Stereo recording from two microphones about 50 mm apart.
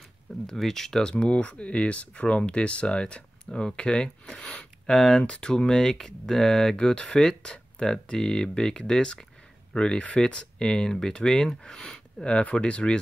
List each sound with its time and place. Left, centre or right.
0.5 s speech: centre
4.5 s a sound: centre
4.9 s speech: centre
5.2 s speech: centre